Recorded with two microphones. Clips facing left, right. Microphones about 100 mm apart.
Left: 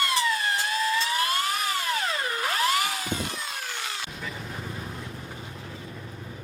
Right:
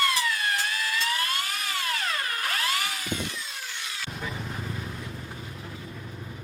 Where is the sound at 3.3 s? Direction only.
55° left (ahead or behind).